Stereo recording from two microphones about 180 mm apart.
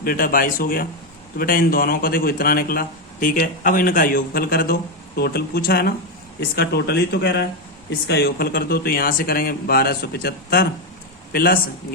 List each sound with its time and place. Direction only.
0.0 s a man's voice: 50° left (ahead or behind)